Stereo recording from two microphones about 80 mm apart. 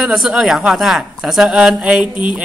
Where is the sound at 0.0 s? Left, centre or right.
Centre.